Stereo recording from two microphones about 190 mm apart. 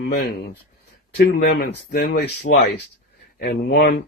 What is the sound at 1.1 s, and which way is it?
Speech, 55° left (ahead or behind).